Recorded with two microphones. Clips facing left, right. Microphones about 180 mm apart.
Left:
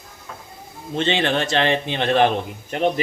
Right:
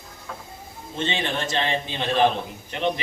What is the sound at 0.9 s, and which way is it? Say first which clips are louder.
A man's voice: left 6 dB; 75° left (ahead or behind).